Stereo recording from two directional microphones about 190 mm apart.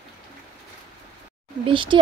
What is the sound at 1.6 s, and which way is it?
Speech, 25° right (ahead or behind).